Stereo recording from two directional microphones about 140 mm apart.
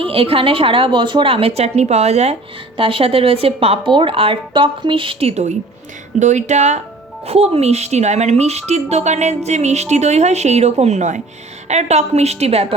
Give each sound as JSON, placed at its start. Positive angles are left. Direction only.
{"t": 0.0, "sound": "speech", "side_deg": -40}
{"t": 2.7, "sound": "speech", "side_deg": -40}
{"t": 7.3, "sound": "speech", "side_deg": -45}